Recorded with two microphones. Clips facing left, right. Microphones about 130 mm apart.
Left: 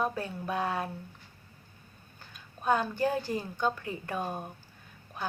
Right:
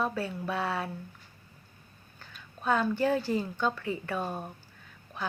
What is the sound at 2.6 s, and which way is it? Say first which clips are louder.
A woman's voice: right 1 dB; 10° left (ahead or behind).